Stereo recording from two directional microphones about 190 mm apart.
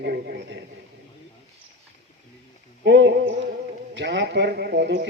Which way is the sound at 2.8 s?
65° right (ahead or behind).